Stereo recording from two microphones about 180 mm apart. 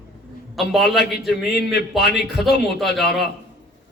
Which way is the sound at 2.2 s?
Centre (ahead or behind).